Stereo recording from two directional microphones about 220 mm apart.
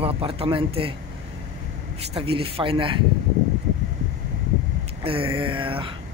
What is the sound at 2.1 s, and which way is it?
Speech, 25° right (ahead or behind).